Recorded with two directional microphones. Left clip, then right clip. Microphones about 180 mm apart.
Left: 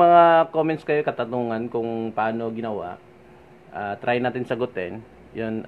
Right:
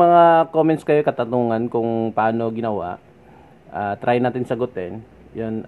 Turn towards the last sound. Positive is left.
turn(degrees=-10)  # may be behind; listen again after turning